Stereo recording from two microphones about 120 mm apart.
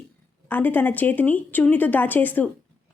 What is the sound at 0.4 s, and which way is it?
A woman's voice, 15° left (ahead or behind).